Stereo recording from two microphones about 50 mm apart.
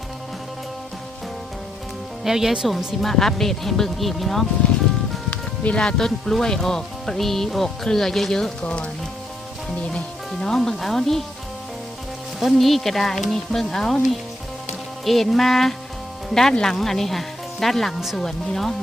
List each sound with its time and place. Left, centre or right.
2.2 s speech: centre
2.7 s frying: centre
5.3 s music: left
6.1 s speech: centre
8.6 s speech: left
10.4 s speech: centre
12.5 s frying: centre
18.2 s speech: centre